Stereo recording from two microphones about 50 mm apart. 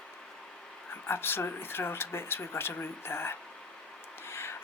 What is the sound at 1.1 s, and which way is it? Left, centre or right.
Speech, left.